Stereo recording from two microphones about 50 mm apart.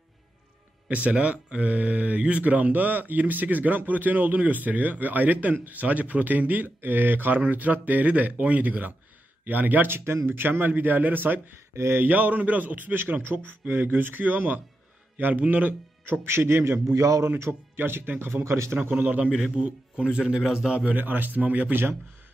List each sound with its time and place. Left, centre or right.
0.8 s speech: right
9.8 s a man's voice: right
11.7 s a sound: right
12.0 s a man's voice: right
16.1 s speech: right
16.8 s a man's voice: right
17.4 s a man's voice: right
18.4 s a man's voice: right
18.8 s speech: right
19.5 s speech: right
20.8 s speech: right